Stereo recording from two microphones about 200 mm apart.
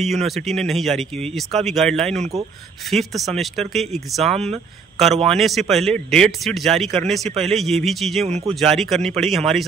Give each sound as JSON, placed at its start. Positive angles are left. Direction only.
{"t": 0.3, "sound": "speech", "side_deg": 0}
{"t": 4.2, "sound": "speech", "side_deg": -30}
{"t": 5.3, "sound": "speech", "side_deg": 0}
{"t": 7.2, "sound": "speech", "side_deg": -30}
{"t": 7.5, "sound": "speech", "side_deg": 0}